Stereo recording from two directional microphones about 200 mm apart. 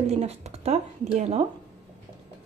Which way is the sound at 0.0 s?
35° right (ahead or behind).